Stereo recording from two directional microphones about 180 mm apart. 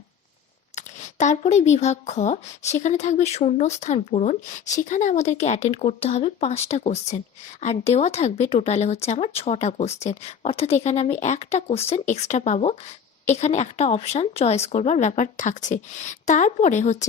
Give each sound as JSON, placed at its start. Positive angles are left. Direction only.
{"t": 0.8, "sound": "speech", "side_deg": 40}